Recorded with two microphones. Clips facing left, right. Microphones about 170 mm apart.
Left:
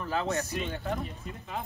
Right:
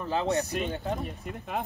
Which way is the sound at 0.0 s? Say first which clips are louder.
Right 3 dB; 20° right (ahead or behind).